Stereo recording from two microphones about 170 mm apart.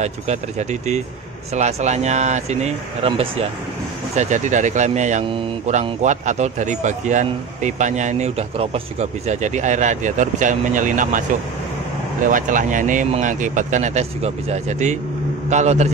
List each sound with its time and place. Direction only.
0.0 s speech: 40° right (ahead or behind)
12.3 s speech: 50° right (ahead or behind)